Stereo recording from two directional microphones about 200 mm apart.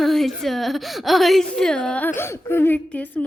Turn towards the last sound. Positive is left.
turn(degrees=10)  # may be behind; listen again after turning